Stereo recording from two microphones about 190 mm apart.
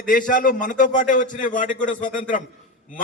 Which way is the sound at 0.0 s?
45° left (ahead or behind).